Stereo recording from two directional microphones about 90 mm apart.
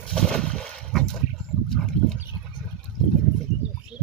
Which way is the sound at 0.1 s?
10° left (ahead or behind).